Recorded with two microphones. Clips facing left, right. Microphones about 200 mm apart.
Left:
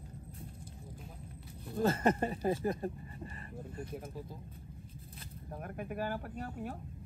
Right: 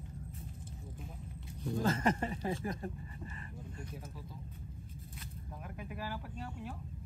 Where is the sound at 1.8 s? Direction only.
30° left (ahead or behind).